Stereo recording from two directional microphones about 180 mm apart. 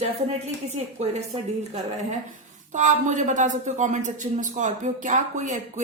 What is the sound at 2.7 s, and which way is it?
A woman's voice, 45° right (ahead or behind).